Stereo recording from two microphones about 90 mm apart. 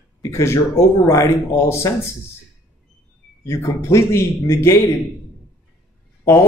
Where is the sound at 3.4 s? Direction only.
30° left (ahead or behind).